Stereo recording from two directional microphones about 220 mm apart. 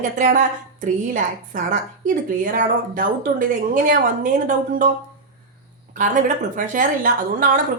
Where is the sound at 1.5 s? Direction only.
35° right (ahead or behind).